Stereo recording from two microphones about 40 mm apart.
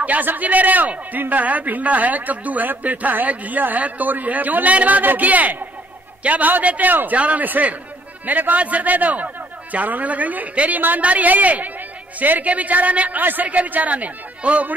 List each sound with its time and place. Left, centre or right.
0.0 s a man's voice: right